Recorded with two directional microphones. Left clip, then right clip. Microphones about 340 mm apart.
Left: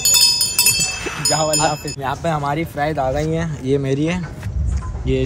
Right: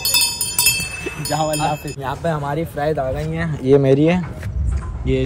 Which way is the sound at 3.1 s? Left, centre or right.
Left.